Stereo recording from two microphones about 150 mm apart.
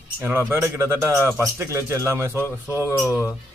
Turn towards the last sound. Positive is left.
turn(degrees=-10)  # may be behind; listen again after turning